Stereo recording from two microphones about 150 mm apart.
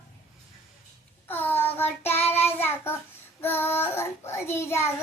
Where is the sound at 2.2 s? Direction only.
45° left (ahead or behind).